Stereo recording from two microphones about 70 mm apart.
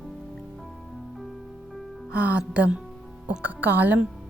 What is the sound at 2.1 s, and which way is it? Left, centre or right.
A woman's voice, centre.